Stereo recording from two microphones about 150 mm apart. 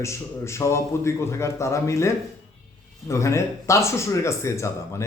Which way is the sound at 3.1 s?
20° left (ahead or behind).